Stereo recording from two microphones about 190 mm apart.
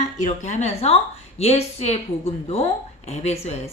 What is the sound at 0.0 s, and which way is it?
A woman's voice, 35° left (ahead or behind).